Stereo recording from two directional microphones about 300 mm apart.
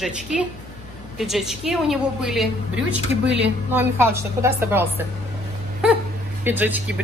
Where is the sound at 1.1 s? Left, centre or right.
Centre.